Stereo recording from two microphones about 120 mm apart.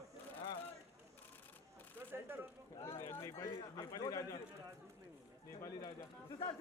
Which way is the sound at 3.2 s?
25° left (ahead or behind).